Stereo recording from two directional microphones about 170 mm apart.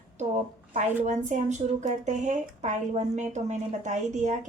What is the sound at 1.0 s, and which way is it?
Speech, 45° right (ahead or behind).